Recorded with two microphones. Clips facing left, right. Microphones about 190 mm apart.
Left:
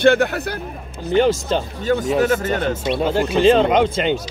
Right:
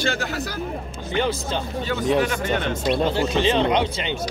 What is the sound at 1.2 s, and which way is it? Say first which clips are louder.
Speech: left 7 dB; 45° left (ahead or behind).